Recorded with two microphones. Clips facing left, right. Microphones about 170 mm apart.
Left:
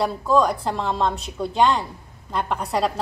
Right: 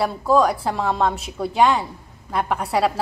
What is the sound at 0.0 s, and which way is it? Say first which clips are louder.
A woman's voice: right 2 dB; 5° right (ahead or behind).